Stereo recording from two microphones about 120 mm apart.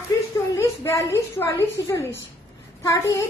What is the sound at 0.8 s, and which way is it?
A woman's voice, 25° left (ahead or behind).